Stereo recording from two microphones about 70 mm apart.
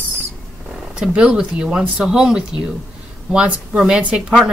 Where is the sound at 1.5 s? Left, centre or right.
Centre.